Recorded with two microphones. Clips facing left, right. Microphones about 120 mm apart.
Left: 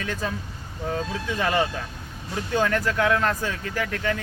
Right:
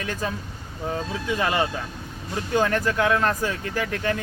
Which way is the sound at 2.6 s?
20° right (ahead or behind).